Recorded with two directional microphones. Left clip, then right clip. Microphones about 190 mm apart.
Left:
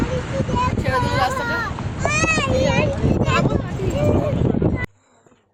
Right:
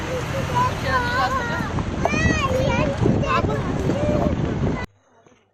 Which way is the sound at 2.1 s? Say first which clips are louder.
Left 4 dB; 60° left (ahead or behind).